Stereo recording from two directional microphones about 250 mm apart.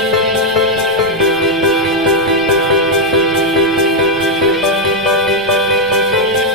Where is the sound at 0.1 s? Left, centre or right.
Centre.